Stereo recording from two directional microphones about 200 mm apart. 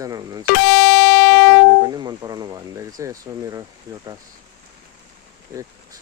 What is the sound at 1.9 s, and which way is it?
Speech, 20° right (ahead or behind).